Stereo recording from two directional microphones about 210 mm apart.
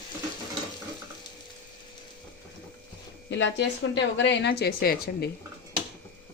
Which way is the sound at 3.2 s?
55° left (ahead or behind).